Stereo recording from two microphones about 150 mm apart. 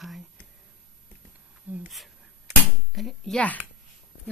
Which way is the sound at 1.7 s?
10° right (ahead or behind).